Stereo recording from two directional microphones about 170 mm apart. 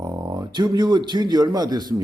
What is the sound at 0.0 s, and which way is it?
Speech, 20° right (ahead or behind).